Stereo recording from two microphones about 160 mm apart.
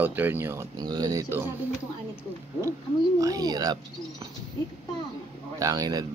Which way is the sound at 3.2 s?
25° right (ahead or behind).